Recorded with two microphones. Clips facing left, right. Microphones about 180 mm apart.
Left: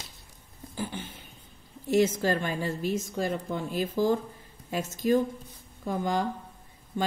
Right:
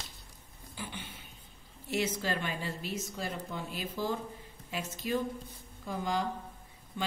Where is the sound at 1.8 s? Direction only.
45° left (ahead or behind).